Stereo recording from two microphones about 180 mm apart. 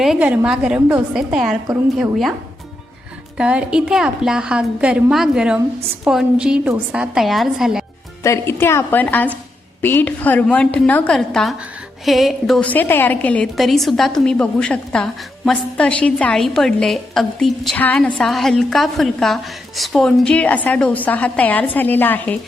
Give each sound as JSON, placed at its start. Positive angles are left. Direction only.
{"t": 0.0, "sound": "a woman's voice", "side_deg": -5}
{"t": 3.3, "sound": "a woman's voice", "side_deg": -5}
{"t": 8.2, "sound": "a woman's voice", "side_deg": 15}